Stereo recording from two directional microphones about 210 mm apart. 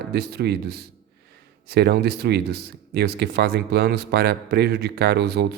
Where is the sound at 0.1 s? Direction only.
50° right (ahead or behind).